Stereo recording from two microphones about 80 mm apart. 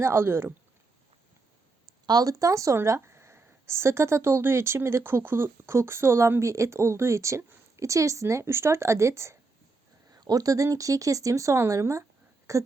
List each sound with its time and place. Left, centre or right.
0.0 s speech: right
2.0 s speech: right
10.1 s speech: right
12.5 s a sound: right